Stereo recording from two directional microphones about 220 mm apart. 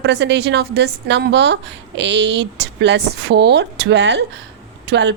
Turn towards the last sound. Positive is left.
turn(degrees=-50)  # may be behind; listen again after turning